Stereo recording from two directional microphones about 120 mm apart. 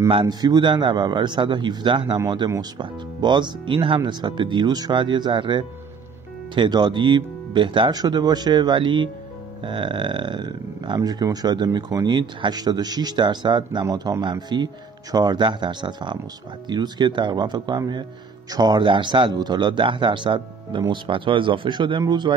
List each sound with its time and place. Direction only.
0.1 s speech: 40° right (ahead or behind)